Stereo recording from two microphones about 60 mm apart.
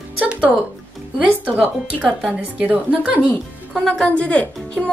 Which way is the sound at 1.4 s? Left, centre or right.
Right.